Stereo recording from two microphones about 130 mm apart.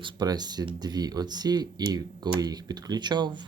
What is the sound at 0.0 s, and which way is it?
Speech, 35° right (ahead or behind).